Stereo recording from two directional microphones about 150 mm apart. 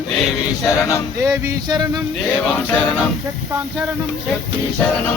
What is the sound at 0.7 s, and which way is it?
Speech, 20° left (ahead or behind).